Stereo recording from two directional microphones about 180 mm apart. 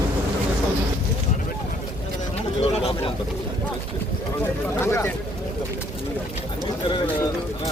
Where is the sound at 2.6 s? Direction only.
35° left (ahead or behind).